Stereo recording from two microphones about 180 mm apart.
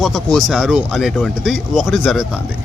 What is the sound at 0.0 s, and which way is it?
Speech, centre (ahead or behind).